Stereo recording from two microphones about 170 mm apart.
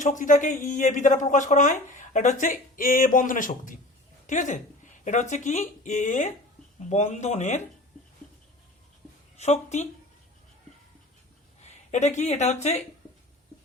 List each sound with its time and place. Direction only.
0.0 s speech: 50° left (ahead or behind)
9.4 s a woman's voice: 40° left (ahead or behind)
11.6 s speech: 40° left (ahead or behind)